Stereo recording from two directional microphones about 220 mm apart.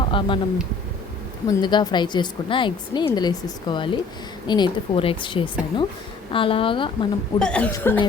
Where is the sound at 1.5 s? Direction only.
20° left (ahead or behind).